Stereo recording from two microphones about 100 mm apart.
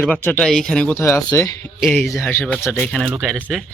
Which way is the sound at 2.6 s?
25° left (ahead or behind).